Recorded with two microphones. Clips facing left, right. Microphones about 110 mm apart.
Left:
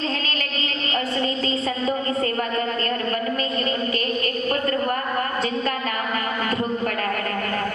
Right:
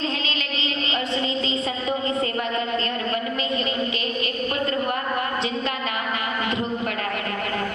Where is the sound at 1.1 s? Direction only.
50° left (ahead or behind).